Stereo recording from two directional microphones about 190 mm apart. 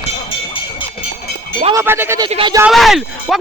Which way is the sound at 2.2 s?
25° right (ahead or behind).